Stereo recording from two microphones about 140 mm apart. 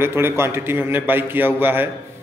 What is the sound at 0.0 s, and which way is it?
A man's voice, 15° right (ahead or behind).